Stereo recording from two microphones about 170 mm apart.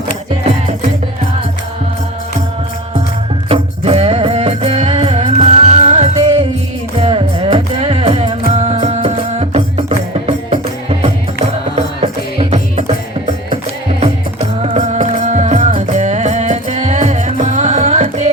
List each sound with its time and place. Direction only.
3.5 s music: 35° right (ahead or behind)
14.0 s music: 40° right (ahead or behind)